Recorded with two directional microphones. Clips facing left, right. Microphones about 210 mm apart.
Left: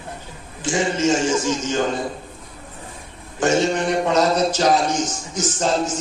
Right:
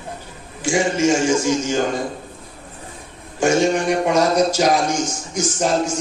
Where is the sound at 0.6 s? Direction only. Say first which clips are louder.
Right 2 dB; 10° right (ahead or behind).